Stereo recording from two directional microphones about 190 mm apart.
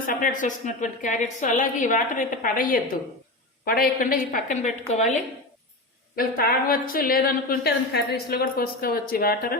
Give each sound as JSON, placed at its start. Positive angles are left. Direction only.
{"t": 0.1, "sound": "a woman's voice", "side_deg": 45}
{"t": 6.1, "sound": "a woman's voice", "side_deg": 50}